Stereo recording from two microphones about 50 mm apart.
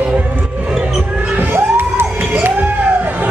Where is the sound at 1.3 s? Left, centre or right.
Right.